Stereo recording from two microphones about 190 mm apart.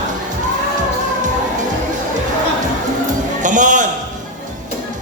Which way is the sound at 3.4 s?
40° right (ahead or behind).